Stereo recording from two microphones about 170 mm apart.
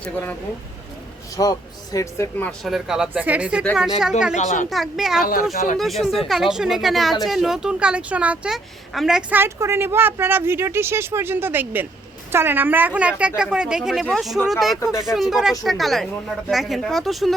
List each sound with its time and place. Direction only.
0.0 s speech: 10° left (ahead or behind)
1.4 s speech: 20° left (ahead or behind)
2.5 s speech: centre (ahead or behind)
4.4 s a woman's voice: 45° left (ahead or behind)
4.7 s speech: centre (ahead or behind)
5.2 s speech: 60° left (ahead or behind)
5.7 s speech: centre (ahead or behind)